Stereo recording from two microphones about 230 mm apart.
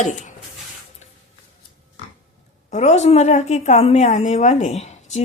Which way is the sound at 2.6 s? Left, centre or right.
Left.